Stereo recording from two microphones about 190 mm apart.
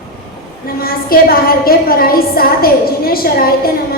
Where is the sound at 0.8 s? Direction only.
50° left (ahead or behind).